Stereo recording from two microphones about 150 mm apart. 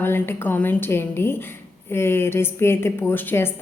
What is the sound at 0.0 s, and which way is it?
A woman's voice, 15° left (ahead or behind).